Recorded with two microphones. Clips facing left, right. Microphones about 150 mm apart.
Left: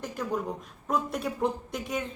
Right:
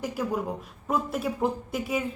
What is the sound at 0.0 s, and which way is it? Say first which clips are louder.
A woman's voice: right 2 dB; 5° right (ahead or behind).